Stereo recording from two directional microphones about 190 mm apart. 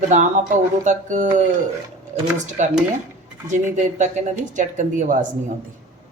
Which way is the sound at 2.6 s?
40° right (ahead or behind).